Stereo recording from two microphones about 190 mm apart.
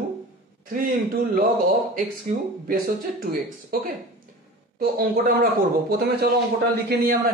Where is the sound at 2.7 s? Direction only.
50° right (ahead or behind).